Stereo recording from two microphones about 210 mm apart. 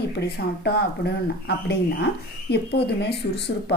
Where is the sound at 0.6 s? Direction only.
50° left (ahead or behind).